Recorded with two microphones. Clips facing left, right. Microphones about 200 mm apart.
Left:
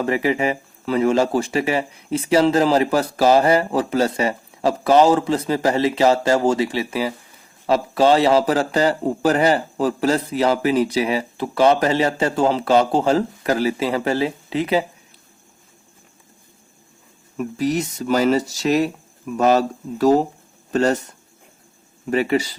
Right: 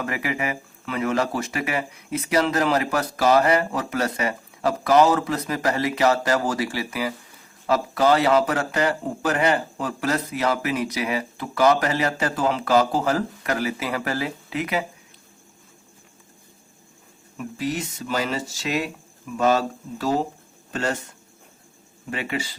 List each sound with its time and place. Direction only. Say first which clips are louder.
0.0 s a man's voice: left 7 dB; 30° left (ahead or behind)
17.3 s speech: left 6 dB; 40° left (ahead or behind)
22.1 s speech: left 10 dB; 40° left (ahead or behind)